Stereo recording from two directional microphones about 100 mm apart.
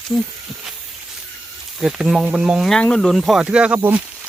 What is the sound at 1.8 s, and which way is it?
Speech, 5° right (ahead or behind).